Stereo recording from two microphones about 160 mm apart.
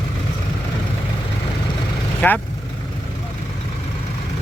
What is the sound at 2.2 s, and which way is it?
Speech, 10° left (ahead or behind).